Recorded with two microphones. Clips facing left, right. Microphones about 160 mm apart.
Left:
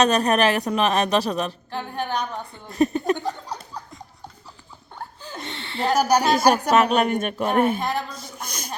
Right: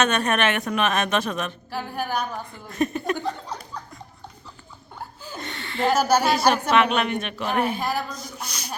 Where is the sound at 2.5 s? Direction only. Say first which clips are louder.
Left 6 dB; 35° left (ahead or behind).